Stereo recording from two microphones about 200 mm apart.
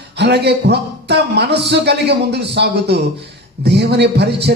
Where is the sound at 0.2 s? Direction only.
55° right (ahead or behind).